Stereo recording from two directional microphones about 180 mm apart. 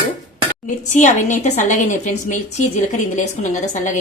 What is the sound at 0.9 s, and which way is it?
A woman's voice, 40° left (ahead or behind).